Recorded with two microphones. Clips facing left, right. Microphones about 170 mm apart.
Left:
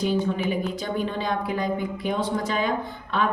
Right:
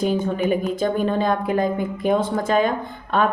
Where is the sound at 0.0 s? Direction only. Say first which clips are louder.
Right 3 dB; 50° right (ahead or behind).